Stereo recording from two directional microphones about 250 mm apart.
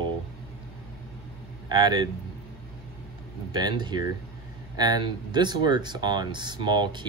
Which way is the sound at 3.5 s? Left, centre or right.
Centre.